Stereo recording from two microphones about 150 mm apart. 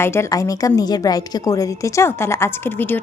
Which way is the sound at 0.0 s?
15° left (ahead or behind).